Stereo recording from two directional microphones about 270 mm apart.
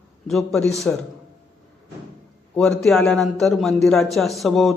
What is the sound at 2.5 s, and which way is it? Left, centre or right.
A man's voice, centre.